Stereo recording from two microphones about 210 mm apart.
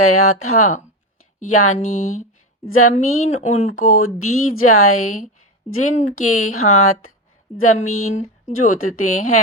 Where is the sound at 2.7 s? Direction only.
90° left.